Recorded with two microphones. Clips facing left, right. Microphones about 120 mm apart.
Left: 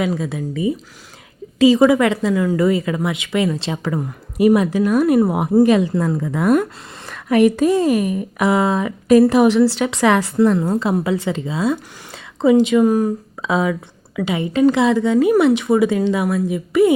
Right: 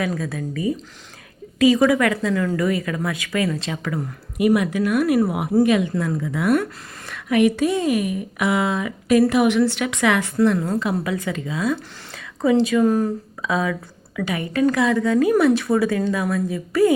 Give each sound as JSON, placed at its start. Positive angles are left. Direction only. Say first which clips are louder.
{"t": 0.0, "sound": "a woman's voice", "louder": "left 4 dB", "side_deg": 20}
{"t": 2.3, "sound": "speech", "louder": "left 4 dB", "side_deg": 15}
{"t": 2.6, "sound": "a woman's voice", "louder": "left 5 dB", "side_deg": 25}
{"t": 5.6, "sound": "a woman's voice", "louder": "left 4 dB", "side_deg": 35}
{"t": 13.4, "sound": "a woman's voice", "louder": "left 4 dB", "side_deg": 20}